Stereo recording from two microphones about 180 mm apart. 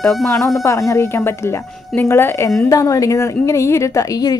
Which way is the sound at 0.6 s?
15° left (ahead or behind).